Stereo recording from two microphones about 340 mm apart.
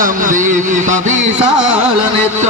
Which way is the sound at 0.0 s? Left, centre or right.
Right.